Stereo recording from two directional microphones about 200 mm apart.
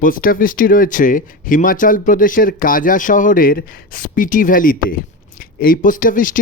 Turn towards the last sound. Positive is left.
turn(degrees=40)  # may be behind; listen again after turning